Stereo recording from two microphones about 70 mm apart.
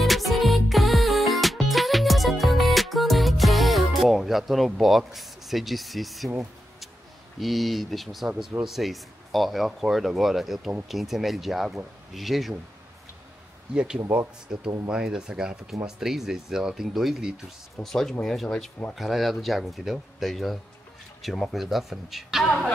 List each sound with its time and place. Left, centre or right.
0.0 s music: centre
7.3 s speech: centre
8.3 s speech: centre
8.6 s speech: centre
14.5 s speech: centre
17.8 s speech: centre